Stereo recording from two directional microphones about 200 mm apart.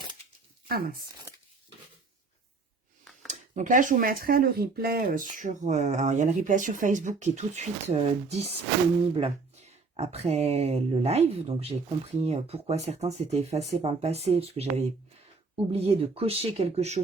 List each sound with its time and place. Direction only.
0.7 s speech: 45° right (ahead or behind)
3.2 s speech: 35° right (ahead or behind)